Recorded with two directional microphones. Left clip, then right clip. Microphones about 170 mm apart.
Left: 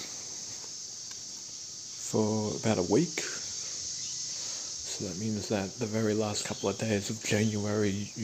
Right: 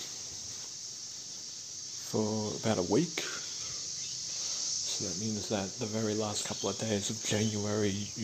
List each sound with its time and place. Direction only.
2.1 s cricket: 20° left (ahead or behind)
4.8 s speech: 20° left (ahead or behind)